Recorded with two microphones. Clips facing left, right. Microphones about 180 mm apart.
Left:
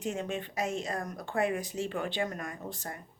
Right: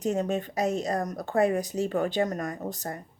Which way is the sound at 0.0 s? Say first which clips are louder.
Right 7 dB; 40° right (ahead or behind).